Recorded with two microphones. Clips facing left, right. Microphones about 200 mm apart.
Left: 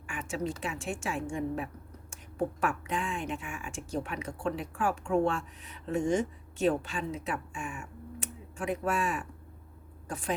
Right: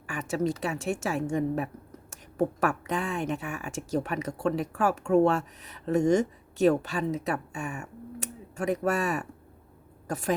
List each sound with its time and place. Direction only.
0.1 s speech: 40° right (ahead or behind)